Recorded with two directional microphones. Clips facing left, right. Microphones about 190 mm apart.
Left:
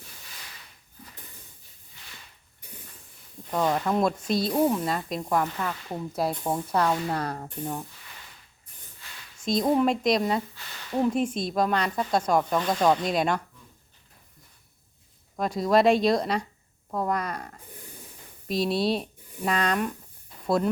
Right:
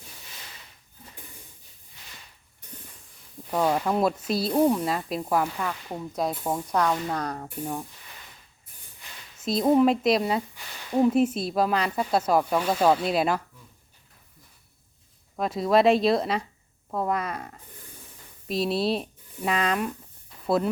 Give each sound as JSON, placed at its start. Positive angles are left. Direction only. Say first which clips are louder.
{"t": 3.5, "sound": "speech", "louder": "right 1 dB", "side_deg": -5}
{"t": 5.6, "sound": "speech", "louder": "even", "side_deg": 5}
{"t": 7.4, "sound": "speech", "louder": "right 1 dB", "side_deg": -5}
{"t": 9.0, "sound": "a sound", "louder": "right 2 dB", "side_deg": -15}
{"t": 9.4, "sound": "speech", "louder": "right 3 dB", "side_deg": -5}
{"t": 15.4, "sound": "speech", "louder": "even", "side_deg": 0}